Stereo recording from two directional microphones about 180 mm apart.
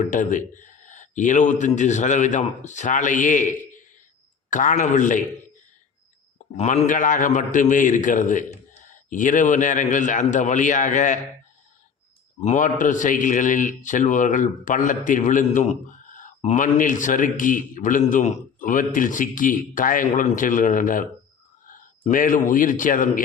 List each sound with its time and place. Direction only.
0.1 s a man's voice: 45° left (ahead or behind)
6.6 s a man's voice: 40° left (ahead or behind)
12.4 s a man's voice: 40° left (ahead or behind)
22.1 s a man's voice: 50° left (ahead or behind)